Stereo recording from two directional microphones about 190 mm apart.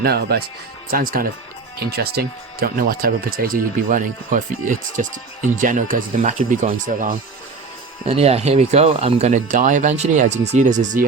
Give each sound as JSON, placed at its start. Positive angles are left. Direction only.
{"t": 0.0, "sound": "speech", "side_deg": -55}